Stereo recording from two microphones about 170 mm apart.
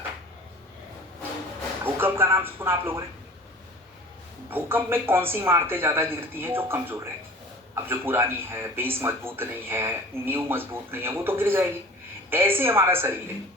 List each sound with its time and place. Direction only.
1.8 s speech: 15° right (ahead or behind)
4.4 s speech: 10° right (ahead or behind)